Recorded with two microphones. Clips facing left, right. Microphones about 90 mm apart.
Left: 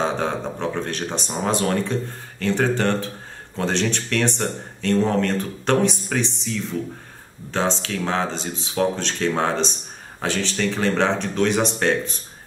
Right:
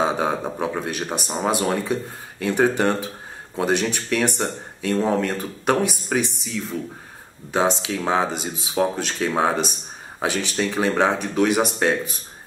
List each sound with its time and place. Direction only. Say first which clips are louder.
0.0 s speech: right 2 dB; 10° right (ahead or behind)